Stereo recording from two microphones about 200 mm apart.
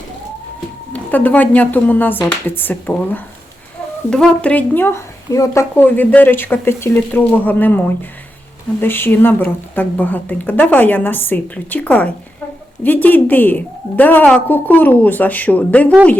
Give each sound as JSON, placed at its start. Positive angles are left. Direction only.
{"t": 0.9, "sound": "a woman's voice", "side_deg": 10}
{"t": 8.8, "sound": "a woman's voice", "side_deg": 10}